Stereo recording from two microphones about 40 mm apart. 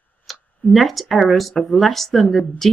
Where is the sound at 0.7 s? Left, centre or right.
Centre.